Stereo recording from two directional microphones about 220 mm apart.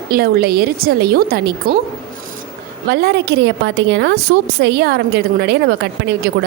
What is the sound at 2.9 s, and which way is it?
A woman's voice, 45° right (ahead or behind).